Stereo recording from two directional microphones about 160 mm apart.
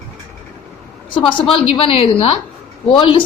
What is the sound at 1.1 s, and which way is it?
A woman's voice, 30° left (ahead or behind).